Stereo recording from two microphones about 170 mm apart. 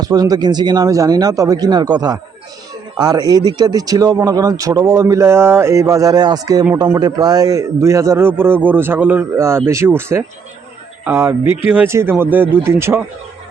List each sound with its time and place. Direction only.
0.0 s a man's voice: 20° right (ahead or behind)